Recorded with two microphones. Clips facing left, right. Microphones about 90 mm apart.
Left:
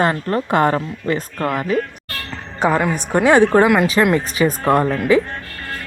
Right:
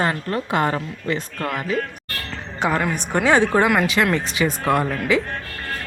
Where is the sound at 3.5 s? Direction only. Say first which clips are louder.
Left 5 dB; 45° left (ahead or behind).